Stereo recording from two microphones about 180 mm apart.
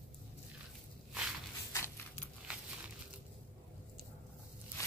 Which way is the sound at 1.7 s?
15° left (ahead or behind).